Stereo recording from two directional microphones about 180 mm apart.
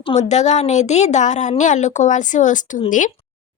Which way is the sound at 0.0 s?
35° left (ahead or behind).